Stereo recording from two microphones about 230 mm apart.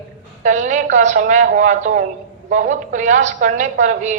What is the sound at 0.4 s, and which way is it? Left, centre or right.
A woman's voice, right.